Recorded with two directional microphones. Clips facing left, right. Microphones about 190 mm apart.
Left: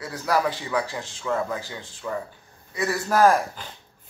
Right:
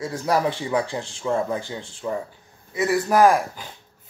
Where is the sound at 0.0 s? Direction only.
25° right (ahead or behind).